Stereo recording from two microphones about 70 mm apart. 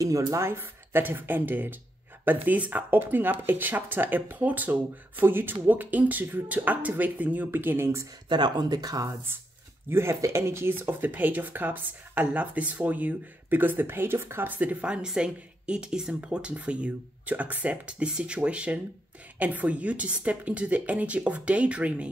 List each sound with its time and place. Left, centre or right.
0.3 s speech: right
8.3 s speech: right
9.8 s speech: right; by 22.1 s centre